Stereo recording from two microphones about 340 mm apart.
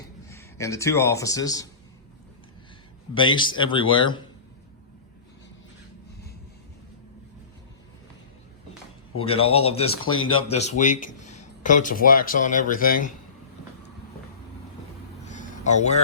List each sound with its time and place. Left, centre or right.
0.3 s a man's voice: centre
3.2 s speech: centre
9.2 s speech: centre
10.0 s speech: left
10.3 s speech: centre
15.2 s a sound: left